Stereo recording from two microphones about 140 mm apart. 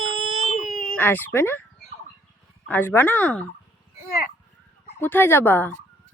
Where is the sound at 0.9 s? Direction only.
15° left (ahead or behind).